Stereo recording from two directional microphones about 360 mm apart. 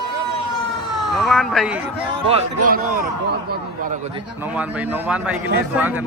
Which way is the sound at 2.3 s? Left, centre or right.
Right.